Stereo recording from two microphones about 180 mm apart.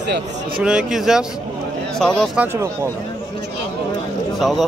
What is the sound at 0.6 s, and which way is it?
Speech, 5° right (ahead or behind).